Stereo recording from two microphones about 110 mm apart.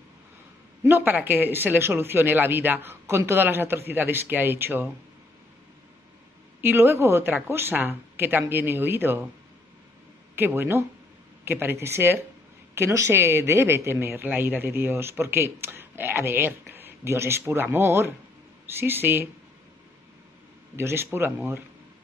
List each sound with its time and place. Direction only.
0.8 s speech: 20° right (ahead or behind)
6.6 s speech: 20° right (ahead or behind)
10.3 s speech: 20° right (ahead or behind)
20.7 s speech: 25° right (ahead or behind)